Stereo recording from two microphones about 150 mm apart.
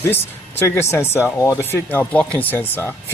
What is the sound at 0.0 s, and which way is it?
Speech, 15° left (ahead or behind).